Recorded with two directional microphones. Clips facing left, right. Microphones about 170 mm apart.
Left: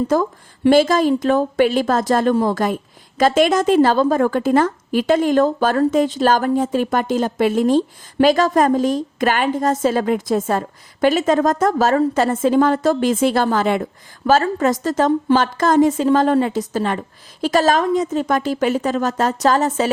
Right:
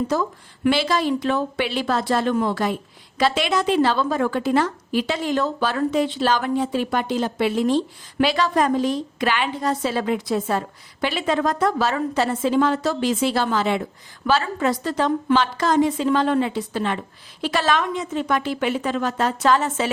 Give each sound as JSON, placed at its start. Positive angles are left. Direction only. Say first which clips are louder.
{"t": 0.1, "sound": "a woman's voice", "louder": "left 5 dB", "side_deg": 50}
{"t": 2.3, "sound": "a woman's voice", "louder": "left 4 dB", "side_deg": 35}
{"t": 3.2, "sound": "a woman's voice", "louder": "left 6 dB", "side_deg": 45}